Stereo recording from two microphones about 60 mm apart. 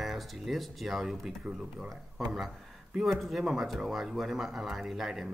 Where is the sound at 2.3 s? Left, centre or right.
Centre.